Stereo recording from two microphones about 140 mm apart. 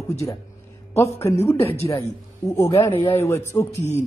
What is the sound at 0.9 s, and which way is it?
A woman's voice, 20° left (ahead or behind).